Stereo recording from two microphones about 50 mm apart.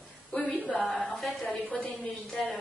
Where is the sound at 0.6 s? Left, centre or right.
Centre.